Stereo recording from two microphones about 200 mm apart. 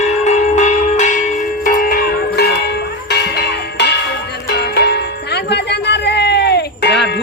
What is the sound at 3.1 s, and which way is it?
Music, 55° left (ahead or behind).